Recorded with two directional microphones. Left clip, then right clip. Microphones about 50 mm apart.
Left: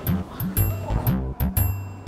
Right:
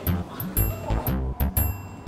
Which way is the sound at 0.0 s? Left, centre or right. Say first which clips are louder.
Left 1 dB; centre.